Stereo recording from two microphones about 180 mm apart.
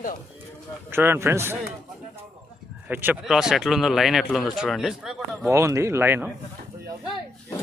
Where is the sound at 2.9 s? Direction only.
10° right (ahead or behind).